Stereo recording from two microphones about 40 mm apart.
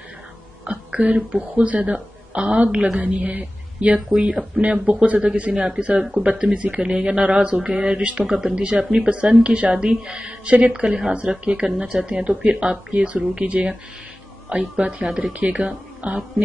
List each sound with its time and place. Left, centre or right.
0.7 s speech: right
5.5 s speech: right
8.0 s speech: right
8.3 s speech: centre
8.5 s speech: right
14.8 s speech: right